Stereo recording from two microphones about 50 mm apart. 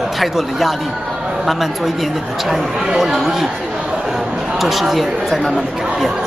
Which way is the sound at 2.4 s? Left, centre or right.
Centre.